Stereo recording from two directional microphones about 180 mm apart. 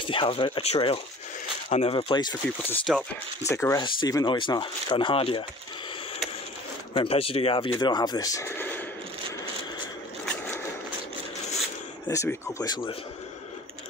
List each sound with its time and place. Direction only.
0.0 s speech: 30° left (ahead or behind)
2.9 s speech: 5° right (ahead or behind)
3.4 s speech: 15° left (ahead or behind)
6.9 s speech: 30° left (ahead or behind); by 8.8 s 10° left (ahead or behind)
12.1 s speech: 15° left (ahead or behind)